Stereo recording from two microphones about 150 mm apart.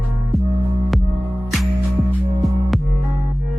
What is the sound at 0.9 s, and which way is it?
Music, centre (ahead or behind).